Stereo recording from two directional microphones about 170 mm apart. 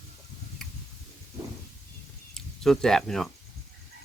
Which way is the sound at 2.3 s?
5° left (ahead or behind).